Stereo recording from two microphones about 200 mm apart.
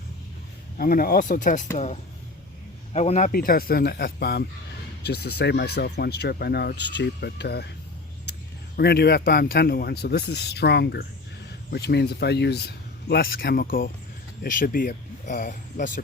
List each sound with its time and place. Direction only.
0.8 s a man's voice: 45° left (ahead or behind)